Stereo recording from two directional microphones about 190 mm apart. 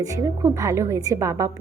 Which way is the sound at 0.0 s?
15° right (ahead or behind).